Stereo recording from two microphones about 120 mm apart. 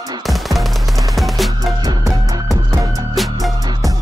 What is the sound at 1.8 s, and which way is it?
Music, 30° right (ahead or behind).